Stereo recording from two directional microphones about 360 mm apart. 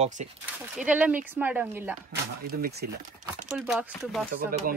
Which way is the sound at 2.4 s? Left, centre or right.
Right.